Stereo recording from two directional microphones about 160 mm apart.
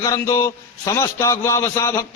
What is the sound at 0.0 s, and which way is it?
A man's voice, 20° left (ahead or behind).